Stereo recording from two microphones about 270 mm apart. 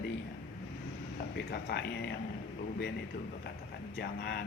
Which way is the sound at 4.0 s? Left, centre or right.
Left.